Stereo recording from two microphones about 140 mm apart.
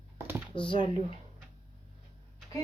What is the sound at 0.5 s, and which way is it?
Speech, 35° left (ahead or behind).